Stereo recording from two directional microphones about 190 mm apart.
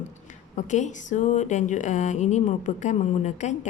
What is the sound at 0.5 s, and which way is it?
Speech, 40° left (ahead or behind).